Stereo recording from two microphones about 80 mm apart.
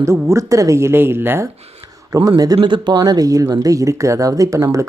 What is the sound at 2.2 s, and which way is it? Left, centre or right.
Speech, right.